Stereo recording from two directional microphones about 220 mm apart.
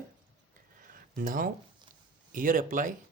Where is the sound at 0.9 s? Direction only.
40° right (ahead or behind).